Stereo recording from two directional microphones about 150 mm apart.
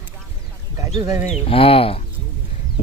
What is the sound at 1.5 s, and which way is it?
Speech, 40° left (ahead or behind).